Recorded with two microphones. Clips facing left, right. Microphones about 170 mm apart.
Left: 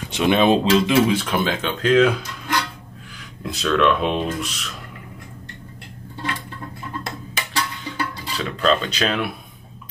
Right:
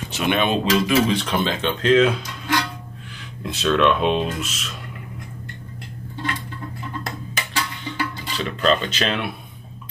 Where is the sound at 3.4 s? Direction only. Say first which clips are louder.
Even; centre (ahead or behind).